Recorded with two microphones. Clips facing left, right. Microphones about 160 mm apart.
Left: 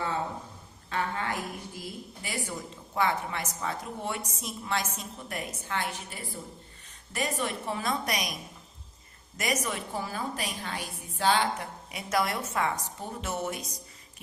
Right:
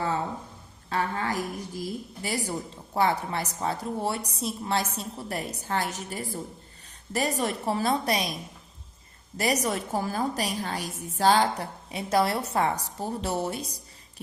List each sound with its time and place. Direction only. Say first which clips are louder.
0.9 s a sound: right 3 dB; 35° right (ahead or behind)
3.6 s a woman's voice: right 7 dB; 35° right (ahead or behind)
9.4 s a woman's voice: right 5 dB; 35° right (ahead or behind)